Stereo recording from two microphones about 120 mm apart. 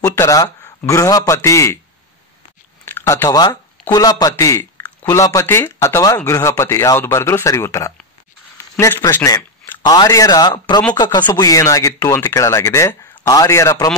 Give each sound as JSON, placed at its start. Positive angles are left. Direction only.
{"t": 0.0, "sound": "speech", "side_deg": 25}
{"t": 2.8, "sound": "a man's voice", "side_deg": 20}